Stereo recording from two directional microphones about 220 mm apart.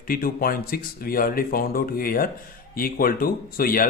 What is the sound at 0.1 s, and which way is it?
Speech, 40° left (ahead or behind).